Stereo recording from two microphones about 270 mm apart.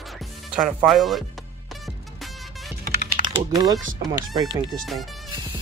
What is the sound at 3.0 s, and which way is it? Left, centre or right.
Typing, right.